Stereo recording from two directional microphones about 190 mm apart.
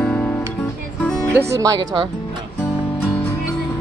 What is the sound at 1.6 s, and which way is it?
Speech, 20° right (ahead or behind).